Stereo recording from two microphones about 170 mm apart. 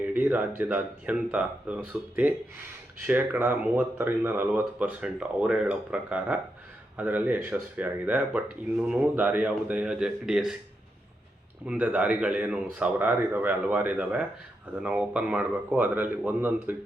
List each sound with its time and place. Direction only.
0.0 s speech: 10° right (ahead or behind)
11.6 s speech: 5° right (ahead or behind)